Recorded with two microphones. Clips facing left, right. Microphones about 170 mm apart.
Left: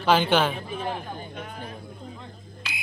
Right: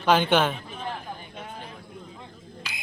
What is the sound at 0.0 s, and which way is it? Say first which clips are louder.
Speech: even; 5° left (ahead or behind).